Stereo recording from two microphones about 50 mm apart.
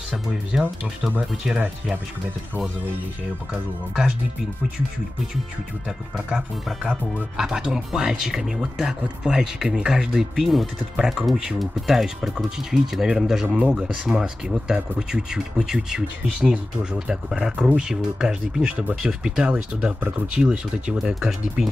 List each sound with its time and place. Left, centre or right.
0.5 s speech: centre
6.1 s speech: centre
21.1 s speech: centre